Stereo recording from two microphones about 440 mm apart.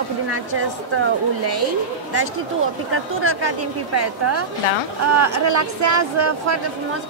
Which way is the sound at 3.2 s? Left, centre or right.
Right.